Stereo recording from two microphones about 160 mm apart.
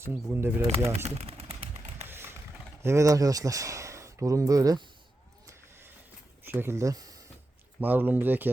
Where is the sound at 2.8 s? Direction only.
15° right (ahead or behind).